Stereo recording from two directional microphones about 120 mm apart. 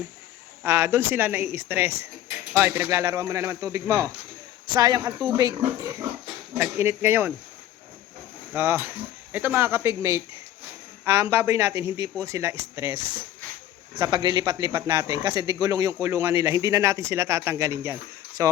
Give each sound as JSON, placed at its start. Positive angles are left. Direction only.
{"t": 0.6, "sound": "speech", "side_deg": -25}
{"t": 8.5, "sound": "speech", "side_deg": -15}
{"t": 14.0, "sound": "speech", "side_deg": -35}